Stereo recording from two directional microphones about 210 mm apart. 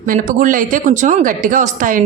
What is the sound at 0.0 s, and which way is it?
Speech, 40° right (ahead or behind).